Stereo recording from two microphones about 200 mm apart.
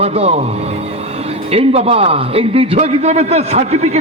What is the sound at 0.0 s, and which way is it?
Speech, 30° right (ahead or behind).